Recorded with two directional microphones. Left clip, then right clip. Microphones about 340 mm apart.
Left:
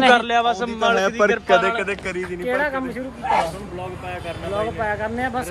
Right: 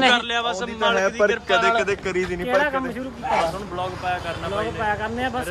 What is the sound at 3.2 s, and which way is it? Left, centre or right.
Speech, left.